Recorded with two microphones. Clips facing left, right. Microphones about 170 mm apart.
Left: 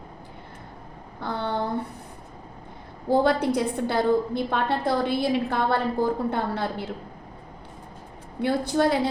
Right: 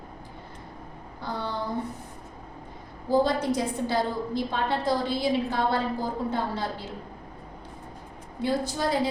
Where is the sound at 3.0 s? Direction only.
60° left (ahead or behind).